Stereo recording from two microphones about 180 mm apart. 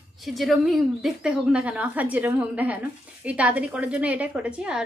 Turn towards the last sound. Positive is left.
turn(degrees=-5)  # may be behind; listen again after turning